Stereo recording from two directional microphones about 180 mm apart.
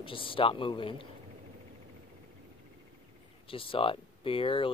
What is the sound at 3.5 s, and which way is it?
Speech, 30° left (ahead or behind).